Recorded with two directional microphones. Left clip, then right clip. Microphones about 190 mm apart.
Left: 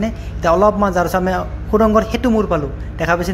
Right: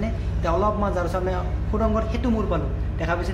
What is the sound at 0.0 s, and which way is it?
A man's voice, 40° left (ahead or behind).